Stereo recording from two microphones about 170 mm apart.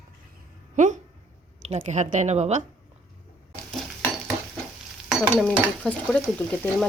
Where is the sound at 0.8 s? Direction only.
45° right (ahead or behind).